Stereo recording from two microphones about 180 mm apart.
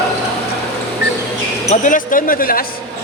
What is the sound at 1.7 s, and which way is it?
Speech, 45° left (ahead or behind).